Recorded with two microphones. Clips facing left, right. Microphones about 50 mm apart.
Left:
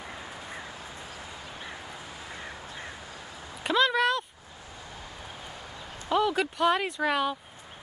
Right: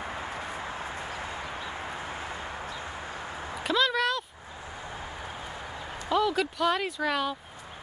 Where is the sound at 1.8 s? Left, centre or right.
Right.